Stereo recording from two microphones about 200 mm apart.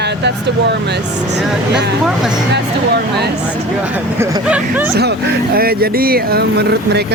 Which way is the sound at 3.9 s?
15° right (ahead or behind).